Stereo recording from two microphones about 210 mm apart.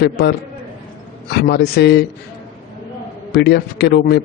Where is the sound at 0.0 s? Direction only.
50° left (ahead or behind).